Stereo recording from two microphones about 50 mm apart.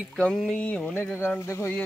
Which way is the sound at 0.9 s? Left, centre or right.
Left.